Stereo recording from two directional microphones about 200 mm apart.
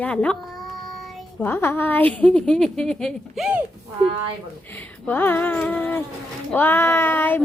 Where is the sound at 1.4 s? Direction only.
10° left (ahead or behind).